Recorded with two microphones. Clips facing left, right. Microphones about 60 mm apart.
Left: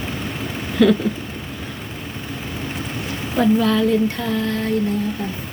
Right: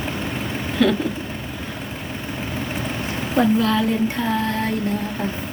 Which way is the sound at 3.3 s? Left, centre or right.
Centre.